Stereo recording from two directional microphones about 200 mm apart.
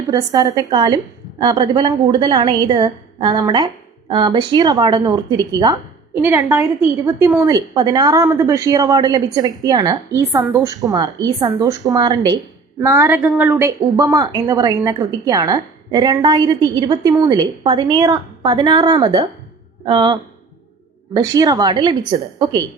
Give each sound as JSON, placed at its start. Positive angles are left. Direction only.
{"t": 0.1, "sound": "a woman's voice", "side_deg": -20}
{"t": 13.2, "sound": "a woman's voice", "side_deg": -5}
{"t": 13.5, "sound": "a woman's voice", "side_deg": -15}